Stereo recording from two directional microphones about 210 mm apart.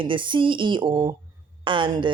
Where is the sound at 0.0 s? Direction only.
25° right (ahead or behind).